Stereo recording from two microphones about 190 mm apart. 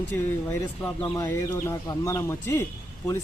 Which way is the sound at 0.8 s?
15° left (ahead or behind).